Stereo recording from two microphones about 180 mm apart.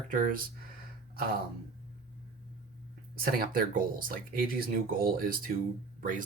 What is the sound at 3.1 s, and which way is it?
Speech, 55° right (ahead or behind).